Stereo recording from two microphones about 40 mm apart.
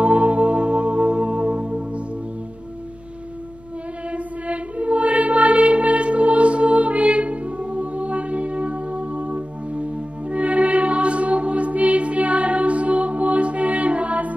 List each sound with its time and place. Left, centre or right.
0.0 s music: right
4.1 s music: right